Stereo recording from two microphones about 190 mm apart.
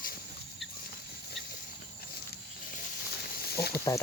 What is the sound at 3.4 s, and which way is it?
Snake, 55° left (ahead or behind).